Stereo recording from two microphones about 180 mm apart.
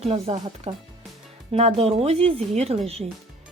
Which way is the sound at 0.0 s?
35° right (ahead or behind).